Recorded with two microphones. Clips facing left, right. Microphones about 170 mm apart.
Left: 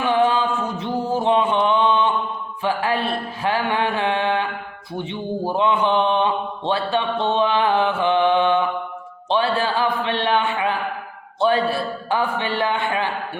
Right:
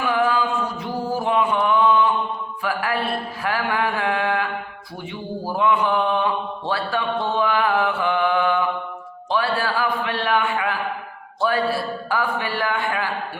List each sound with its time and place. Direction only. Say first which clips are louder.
0.0 s mantra: left 2 dB; 25° left (ahead or behind)
2.6 s a man's voice: left 2 dB; 25° left (ahead or behind)